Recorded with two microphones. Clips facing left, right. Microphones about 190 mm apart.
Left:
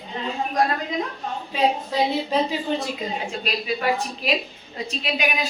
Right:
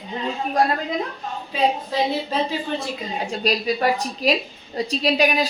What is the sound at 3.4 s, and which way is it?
Speech, 40° right (ahead or behind).